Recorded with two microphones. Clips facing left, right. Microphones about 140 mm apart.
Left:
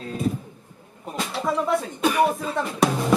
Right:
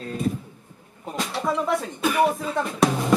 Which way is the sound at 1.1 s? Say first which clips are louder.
Even; centre (ahead or behind).